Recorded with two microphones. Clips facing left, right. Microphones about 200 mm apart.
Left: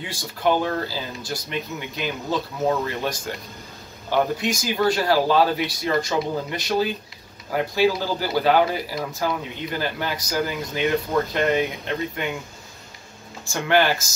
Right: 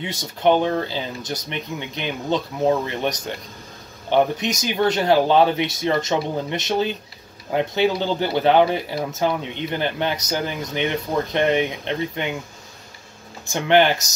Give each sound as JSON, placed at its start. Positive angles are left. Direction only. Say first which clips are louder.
{"t": 0.0, "sound": "speech", "louder": "right 4 dB", "side_deg": -20}
{"t": 4.1, "sound": "speech", "louder": "right 3 dB", "side_deg": -20}
{"t": 13.5, "sound": "speech", "louder": "right 3 dB", "side_deg": -20}